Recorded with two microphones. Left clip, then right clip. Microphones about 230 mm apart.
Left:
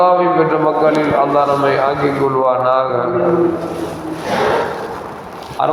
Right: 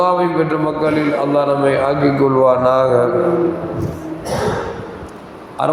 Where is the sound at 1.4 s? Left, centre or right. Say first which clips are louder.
Left 1 dB; right.